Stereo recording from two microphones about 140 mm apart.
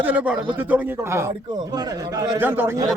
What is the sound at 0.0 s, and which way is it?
A man's voice, 10° right (ahead or behind).